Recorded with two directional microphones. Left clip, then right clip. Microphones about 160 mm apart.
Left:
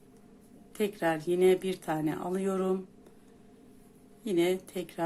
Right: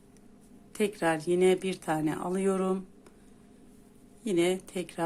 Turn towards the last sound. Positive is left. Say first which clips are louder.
# even
turn(degrees=-20)  # may be behind; listen again after turning